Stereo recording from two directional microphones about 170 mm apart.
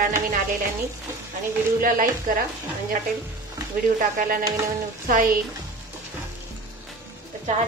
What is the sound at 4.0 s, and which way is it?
A woman's voice, 50° right (ahead or behind).